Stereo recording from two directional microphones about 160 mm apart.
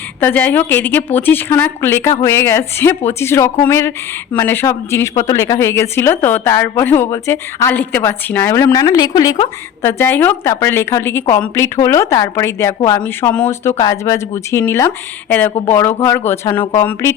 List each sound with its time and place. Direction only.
0.2 s a woman's voice: 10° left (ahead or behind)